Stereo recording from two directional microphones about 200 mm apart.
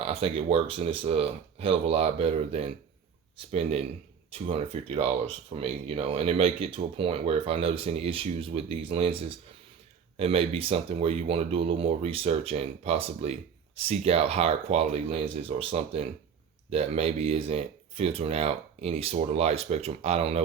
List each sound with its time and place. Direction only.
0.0 s speech: 30° right (ahead or behind)
10.2 s speech: 30° right (ahead or behind)